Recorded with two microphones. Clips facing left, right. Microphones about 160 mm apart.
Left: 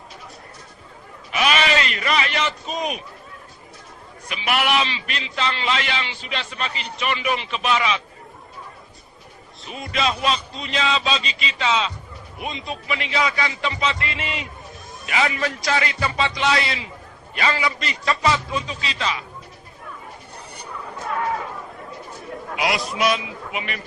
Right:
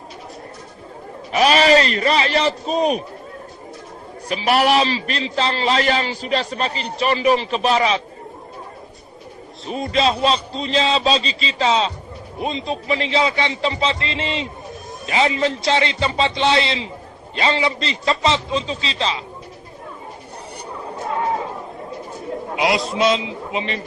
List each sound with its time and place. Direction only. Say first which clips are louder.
1.3 s a man's voice: right 7 dB; 35° right (ahead or behind)
4.3 s a man's voice: right 6 dB; 35° right (ahead or behind)
9.6 s a man's voice: right 6 dB; 30° right (ahead or behind)
20.7 s chatter: right 3 dB; 25° right (ahead or behind)
22.3 s a man's voice: right 4 dB; 25° right (ahead or behind)